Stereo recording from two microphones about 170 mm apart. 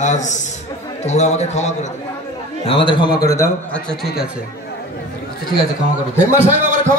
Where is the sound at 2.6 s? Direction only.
30° left (ahead or behind).